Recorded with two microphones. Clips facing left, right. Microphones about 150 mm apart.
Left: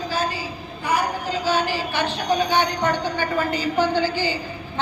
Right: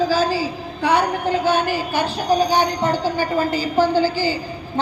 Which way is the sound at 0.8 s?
65° right (ahead or behind).